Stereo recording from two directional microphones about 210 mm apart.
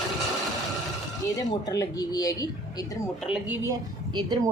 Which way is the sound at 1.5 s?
15° left (ahead or behind).